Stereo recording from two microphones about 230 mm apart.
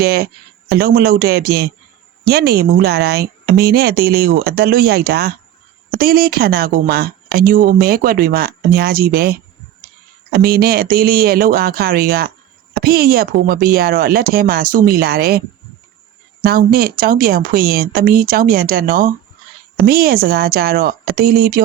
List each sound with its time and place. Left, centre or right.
0.0 s a woman's voice: right
10.3 s a woman's voice: right